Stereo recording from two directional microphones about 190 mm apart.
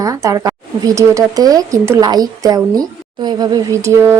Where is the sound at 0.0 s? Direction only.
15° right (ahead or behind).